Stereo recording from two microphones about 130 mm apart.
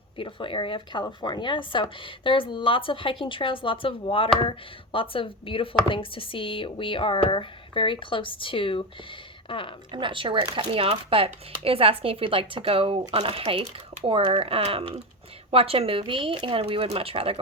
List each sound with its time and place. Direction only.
0.2 s speech: 40° left (ahead or behind)
9.9 s speech: 40° right (ahead or behind)